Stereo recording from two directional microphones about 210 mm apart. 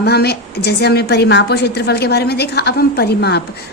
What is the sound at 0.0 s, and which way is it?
A woman's voice, 50° left (ahead or behind).